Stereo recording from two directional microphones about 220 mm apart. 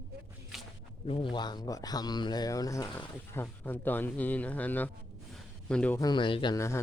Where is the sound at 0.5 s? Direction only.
Centre (ahead or behind).